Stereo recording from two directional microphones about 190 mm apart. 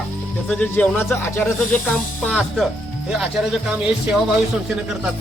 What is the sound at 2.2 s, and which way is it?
Speech, centre (ahead or behind).